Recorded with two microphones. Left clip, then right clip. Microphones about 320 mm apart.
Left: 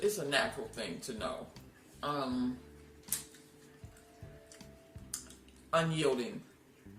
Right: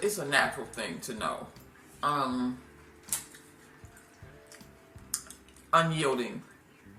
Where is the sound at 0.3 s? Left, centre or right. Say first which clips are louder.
Right 6 dB; left.